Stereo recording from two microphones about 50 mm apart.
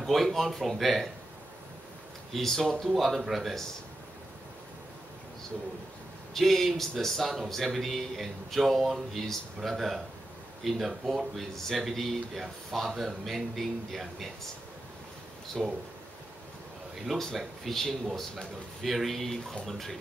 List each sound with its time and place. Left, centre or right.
0.0 s speech: centre
2.3 s speech: centre
6.3 s speech: centre
17.1 s speech: centre